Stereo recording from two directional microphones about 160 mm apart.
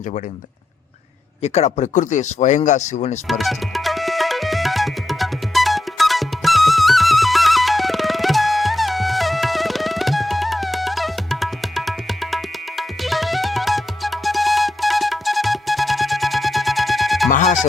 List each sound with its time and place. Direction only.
1.4 s speech: 45° left (ahead or behind)
3.2 s tabla: centre (ahead or behind)
17.2 s music: 50° left (ahead or behind)